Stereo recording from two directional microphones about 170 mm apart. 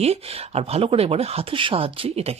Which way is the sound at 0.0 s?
35° right (ahead or behind).